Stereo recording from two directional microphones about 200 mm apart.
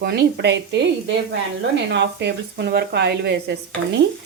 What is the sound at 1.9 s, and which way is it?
Speech, 60° right (ahead or behind).